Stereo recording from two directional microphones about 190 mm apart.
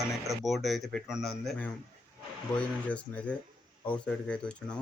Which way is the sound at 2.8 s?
5° left (ahead or behind).